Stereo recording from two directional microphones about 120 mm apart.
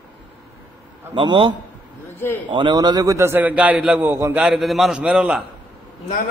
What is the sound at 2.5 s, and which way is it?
A man's voice, 40° right (ahead or behind).